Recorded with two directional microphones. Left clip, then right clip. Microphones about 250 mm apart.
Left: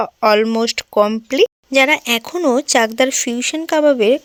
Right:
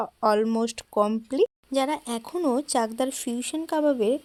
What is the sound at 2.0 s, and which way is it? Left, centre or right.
Speech, left.